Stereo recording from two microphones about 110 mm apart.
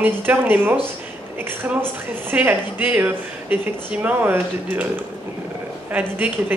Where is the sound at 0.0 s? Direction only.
15° right (ahead or behind).